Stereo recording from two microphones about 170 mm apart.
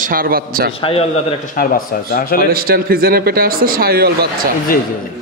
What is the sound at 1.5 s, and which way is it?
Speech, 55° left (ahead or behind).